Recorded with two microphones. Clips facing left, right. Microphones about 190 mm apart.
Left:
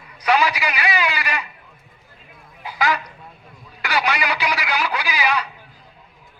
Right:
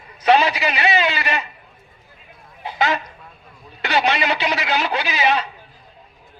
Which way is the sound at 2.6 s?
25° right (ahead or behind).